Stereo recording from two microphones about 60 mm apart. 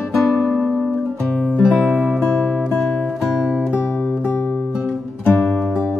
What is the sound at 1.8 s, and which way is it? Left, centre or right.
Music, centre.